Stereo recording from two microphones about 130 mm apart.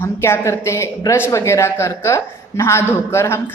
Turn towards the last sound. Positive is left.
turn(degrees=20)  # may be behind; listen again after turning